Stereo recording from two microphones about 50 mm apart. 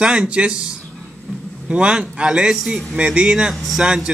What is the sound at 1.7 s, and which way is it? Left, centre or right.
A man's voice, right.